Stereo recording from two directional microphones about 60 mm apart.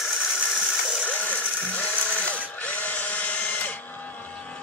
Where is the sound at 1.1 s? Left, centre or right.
Left.